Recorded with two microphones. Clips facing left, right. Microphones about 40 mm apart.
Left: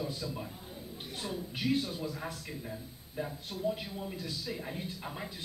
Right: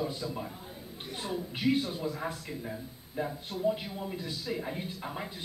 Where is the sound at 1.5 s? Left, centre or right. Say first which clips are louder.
Right 3 dB; centre.